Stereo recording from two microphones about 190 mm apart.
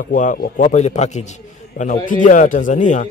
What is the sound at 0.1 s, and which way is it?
A man's voice, 45° left (ahead or behind).